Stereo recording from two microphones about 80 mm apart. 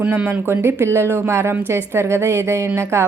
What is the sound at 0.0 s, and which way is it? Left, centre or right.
Speech, centre.